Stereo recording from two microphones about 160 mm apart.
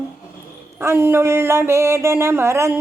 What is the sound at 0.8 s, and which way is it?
Speech, 15° right (ahead or behind).